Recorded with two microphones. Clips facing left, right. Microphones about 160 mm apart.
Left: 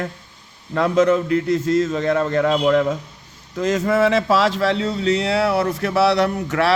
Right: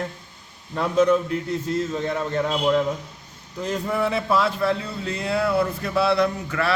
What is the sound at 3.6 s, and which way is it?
Speech, 90° left.